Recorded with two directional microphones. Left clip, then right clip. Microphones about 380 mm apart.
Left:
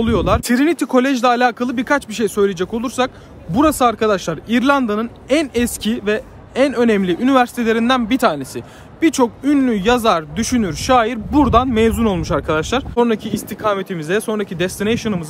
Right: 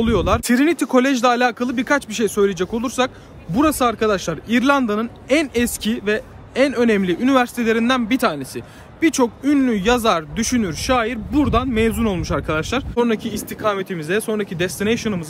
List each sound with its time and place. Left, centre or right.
0.0 s speech: centre